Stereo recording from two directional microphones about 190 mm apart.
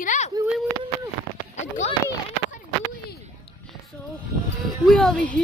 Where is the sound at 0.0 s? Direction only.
40° left (ahead or behind).